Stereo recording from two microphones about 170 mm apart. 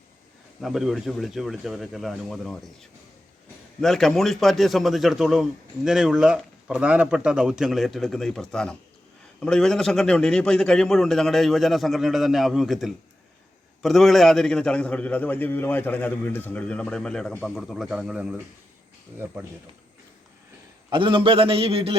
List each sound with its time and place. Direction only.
0.6 s a man's voice: centre (ahead or behind)
20.9 s a man's voice: 30° right (ahead or behind)